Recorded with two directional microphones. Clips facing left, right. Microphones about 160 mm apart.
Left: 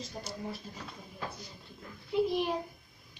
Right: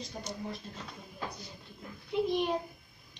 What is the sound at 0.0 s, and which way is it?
Speech, 5° left (ahead or behind).